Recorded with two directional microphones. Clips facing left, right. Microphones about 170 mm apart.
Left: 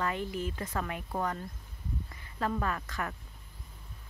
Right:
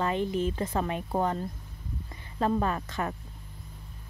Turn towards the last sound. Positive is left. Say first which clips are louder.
# right 4 dB
turn(degrees=-25)  # may be behind; listen again after turning